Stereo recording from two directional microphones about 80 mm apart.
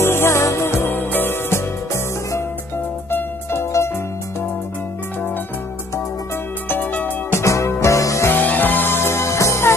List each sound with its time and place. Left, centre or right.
0.0 s music: left
3.1 s music: left
6.7 s music: left
7.3 s music: left
8.3 s music: left